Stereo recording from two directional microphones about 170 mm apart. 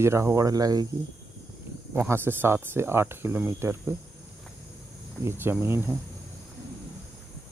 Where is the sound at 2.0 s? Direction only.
15° right (ahead or behind).